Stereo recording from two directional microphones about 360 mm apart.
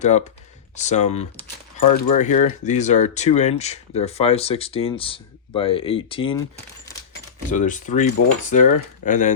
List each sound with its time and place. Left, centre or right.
0.0 s speech: centre
1.8 s speech: left
2.1 s speech: centre
7.5 s speech: left